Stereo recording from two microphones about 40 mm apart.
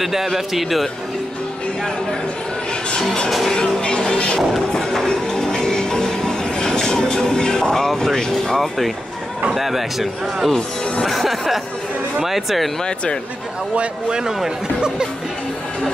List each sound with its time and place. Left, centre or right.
0.0 s speech: centre
3.3 s speech: centre
3.5 s vehicle: centre
3.8 s music: left
8.5 s speech: centre
12.8 s speech: left
13.7 s speech: right